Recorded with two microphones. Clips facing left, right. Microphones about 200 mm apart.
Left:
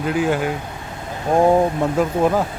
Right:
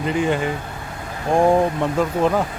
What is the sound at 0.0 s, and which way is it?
Speech, 5° left (ahead or behind).